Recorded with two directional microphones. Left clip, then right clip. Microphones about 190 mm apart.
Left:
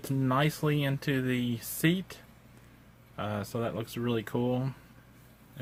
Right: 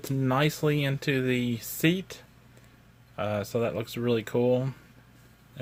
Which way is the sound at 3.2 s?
20° right (ahead or behind).